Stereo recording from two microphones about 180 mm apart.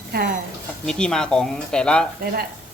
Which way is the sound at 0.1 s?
50° right (ahead or behind).